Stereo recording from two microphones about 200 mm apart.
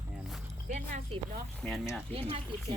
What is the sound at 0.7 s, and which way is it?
Speech, 40° right (ahead or behind).